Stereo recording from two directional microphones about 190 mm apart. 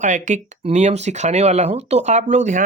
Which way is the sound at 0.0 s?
40° right (ahead or behind).